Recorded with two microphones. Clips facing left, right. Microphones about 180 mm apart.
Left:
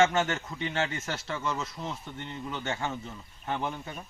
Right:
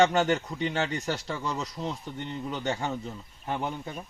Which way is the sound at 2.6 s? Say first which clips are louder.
Right 3 dB; 15° right (ahead or behind).